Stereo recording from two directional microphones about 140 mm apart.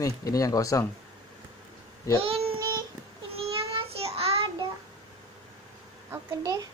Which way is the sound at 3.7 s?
45° right (ahead or behind).